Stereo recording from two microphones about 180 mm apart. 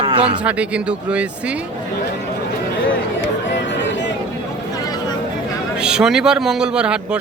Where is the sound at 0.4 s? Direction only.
5° right (ahead or behind).